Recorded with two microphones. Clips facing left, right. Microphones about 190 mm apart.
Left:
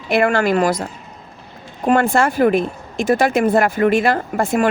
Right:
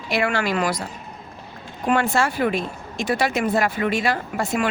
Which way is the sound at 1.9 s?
50° left (ahead or behind).